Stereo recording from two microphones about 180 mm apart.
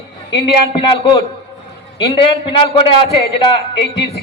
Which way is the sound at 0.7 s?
30° left (ahead or behind).